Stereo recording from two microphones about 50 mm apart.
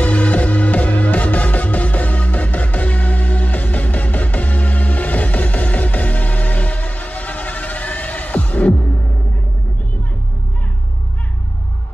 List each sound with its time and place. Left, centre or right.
0.0 s music: left